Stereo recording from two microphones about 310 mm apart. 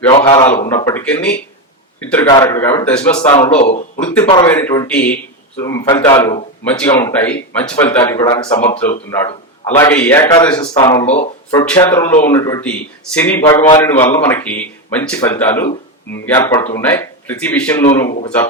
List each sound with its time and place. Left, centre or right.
0.1 s a man's voice: centre
3.6 s a man's voice: left
11.8 s a man's voice: centre